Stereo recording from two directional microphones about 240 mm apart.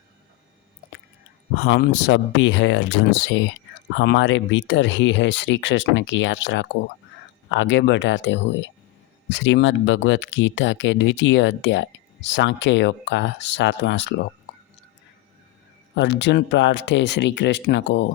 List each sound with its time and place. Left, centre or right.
1.5 s speech: left
16.0 s speech: left